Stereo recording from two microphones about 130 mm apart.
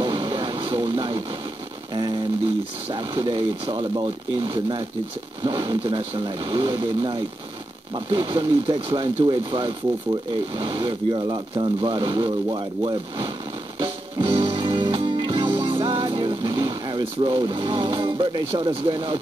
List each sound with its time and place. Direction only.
0.0 s a sound: 40° right (ahead or behind)
2.9 s speech: 40° right (ahead or behind)
13.7 s music: 40° right (ahead or behind)